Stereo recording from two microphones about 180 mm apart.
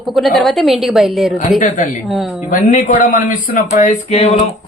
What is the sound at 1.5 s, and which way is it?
Speech, 45° left (ahead or behind).